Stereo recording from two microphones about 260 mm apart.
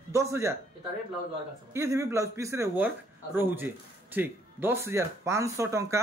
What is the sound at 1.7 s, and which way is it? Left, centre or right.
Speech, centre.